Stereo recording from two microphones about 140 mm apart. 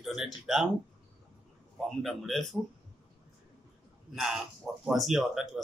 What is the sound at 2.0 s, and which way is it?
Speech, centre (ahead or behind).